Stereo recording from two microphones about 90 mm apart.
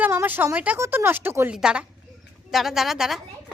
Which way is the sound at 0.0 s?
25° right (ahead or behind).